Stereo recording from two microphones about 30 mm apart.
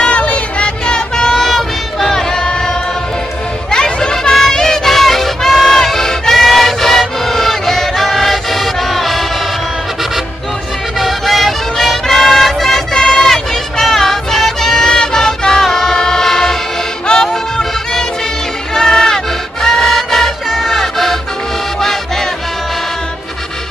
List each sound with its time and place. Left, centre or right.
0.0 s music: left
0.9 s music: left
1.4 s a sound: centre
2.4 s choir: left
3.7 s children playing: left
4.9 s music: centre
5.9 s music: centre
11.0 s music: centre
12.9 s music: centre
17.1 s music: left
18.8 s music: centre
20.4 s music: centre
20.8 s music: centre